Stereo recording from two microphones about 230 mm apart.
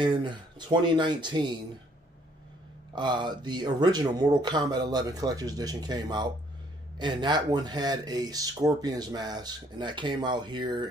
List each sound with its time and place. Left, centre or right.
0.0 s speech: right
2.9 s speech: centre